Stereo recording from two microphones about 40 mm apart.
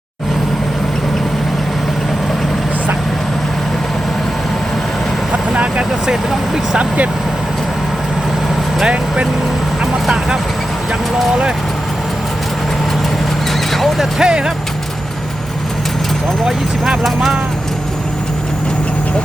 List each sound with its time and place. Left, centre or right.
6.7 s speech: right
9.8 s vehicle: centre
13.7 s neigh: centre
14.2 s speech: centre